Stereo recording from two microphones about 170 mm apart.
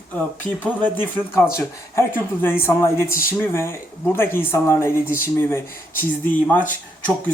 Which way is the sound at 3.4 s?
15° left (ahead or behind).